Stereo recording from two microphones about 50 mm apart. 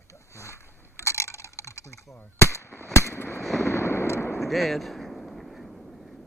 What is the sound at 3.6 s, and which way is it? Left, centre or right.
Artillery fire, left.